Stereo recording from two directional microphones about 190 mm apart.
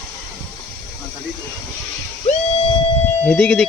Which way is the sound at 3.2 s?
5° left (ahead or behind).